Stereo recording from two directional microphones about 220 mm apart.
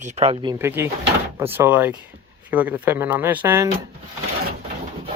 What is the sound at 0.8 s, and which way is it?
Speech, 10° right (ahead or behind).